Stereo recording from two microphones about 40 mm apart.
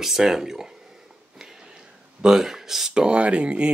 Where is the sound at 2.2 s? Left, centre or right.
Centre.